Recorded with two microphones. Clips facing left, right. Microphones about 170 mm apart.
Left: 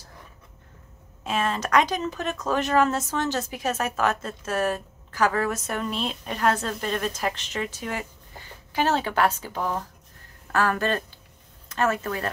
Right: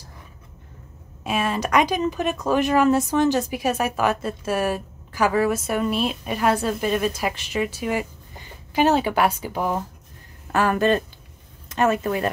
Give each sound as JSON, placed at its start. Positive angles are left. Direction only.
{"t": 1.2, "sound": "speech", "side_deg": -10}